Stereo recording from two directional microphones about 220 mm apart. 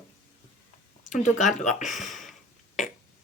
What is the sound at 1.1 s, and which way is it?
Speech, 35° left (ahead or behind).